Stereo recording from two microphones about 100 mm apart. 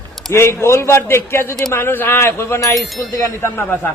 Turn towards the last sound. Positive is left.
turn(degrees=25)  # may be behind; listen again after turning